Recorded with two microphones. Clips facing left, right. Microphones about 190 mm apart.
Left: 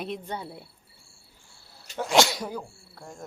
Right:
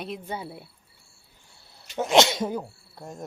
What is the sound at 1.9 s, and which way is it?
Speech, 20° right (ahead or behind).